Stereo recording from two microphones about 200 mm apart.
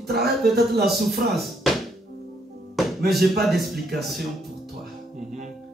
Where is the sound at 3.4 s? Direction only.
Centre (ahead or behind).